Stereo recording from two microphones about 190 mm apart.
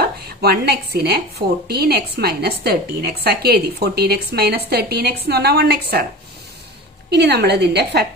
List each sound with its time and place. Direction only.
0.0 s a woman's voice: 55° right (ahead or behind)
7.1 s a woman's voice: 60° right (ahead or behind)